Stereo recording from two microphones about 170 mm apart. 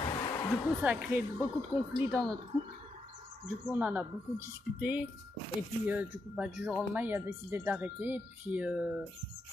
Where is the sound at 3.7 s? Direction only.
10° right (ahead or behind).